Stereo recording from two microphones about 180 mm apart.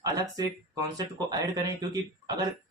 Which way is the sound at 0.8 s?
20° right (ahead or behind).